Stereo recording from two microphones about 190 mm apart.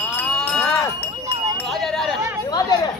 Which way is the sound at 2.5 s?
20° left (ahead or behind).